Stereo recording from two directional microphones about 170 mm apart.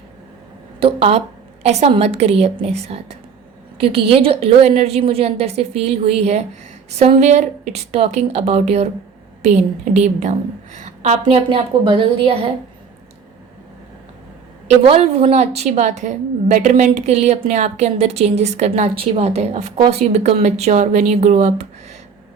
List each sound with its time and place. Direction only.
0.8 s a woman's voice: 35° right (ahead or behind)
14.8 s a woman's voice: 35° right (ahead or behind)